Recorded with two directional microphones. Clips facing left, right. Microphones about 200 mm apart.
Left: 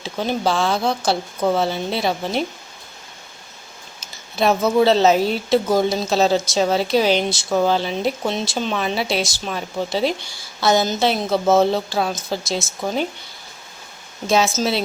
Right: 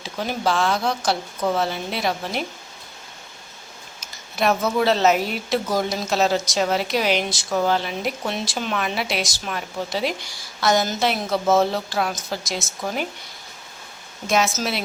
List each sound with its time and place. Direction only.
0.0 s speech: 30° left (ahead or behind)
4.0 s speech: 30° left (ahead or behind)
14.3 s speech: 30° left (ahead or behind)